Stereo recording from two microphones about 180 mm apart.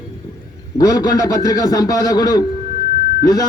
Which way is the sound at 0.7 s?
20° left (ahead or behind).